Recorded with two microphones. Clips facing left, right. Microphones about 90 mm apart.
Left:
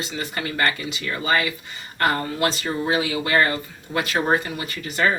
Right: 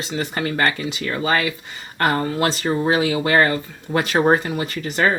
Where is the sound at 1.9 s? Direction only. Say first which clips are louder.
Right 3 dB; 35° right (ahead or behind).